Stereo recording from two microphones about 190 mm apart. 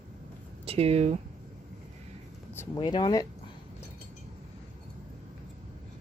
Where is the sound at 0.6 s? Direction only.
30° right (ahead or behind).